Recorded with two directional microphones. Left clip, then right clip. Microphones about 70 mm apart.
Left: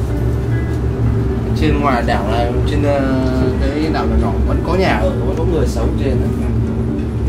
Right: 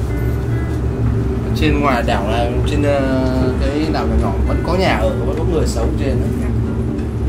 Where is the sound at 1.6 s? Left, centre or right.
Right.